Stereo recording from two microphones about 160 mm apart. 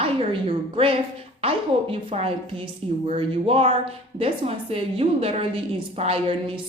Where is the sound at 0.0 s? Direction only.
35° right (ahead or behind).